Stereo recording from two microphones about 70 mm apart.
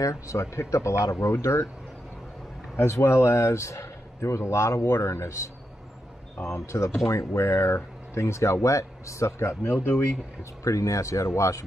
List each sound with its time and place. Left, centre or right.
0.0 s speech: left
2.7 s speech: left
6.6 s speech: left
10.6 s speech: left